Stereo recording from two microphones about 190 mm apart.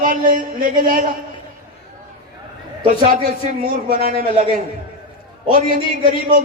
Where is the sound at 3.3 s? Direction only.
50° right (ahead or behind).